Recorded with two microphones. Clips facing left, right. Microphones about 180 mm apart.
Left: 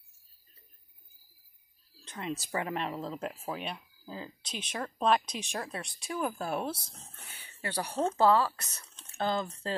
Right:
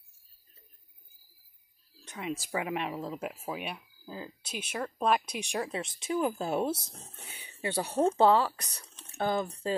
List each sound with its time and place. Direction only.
2.0 s speech: 10° right (ahead or behind)